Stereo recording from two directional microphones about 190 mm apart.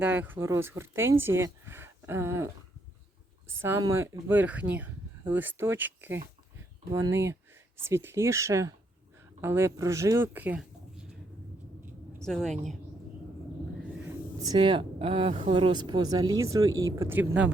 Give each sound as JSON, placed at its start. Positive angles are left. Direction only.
{"t": 0.0, "sound": "speech", "side_deg": -10}
{"t": 3.6, "sound": "speech", "side_deg": -15}
{"t": 12.2, "sound": "a woman's voice", "side_deg": 5}
{"t": 14.5, "sound": "speech", "side_deg": -25}